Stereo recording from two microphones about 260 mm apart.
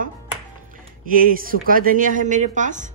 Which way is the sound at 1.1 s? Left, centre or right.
Right.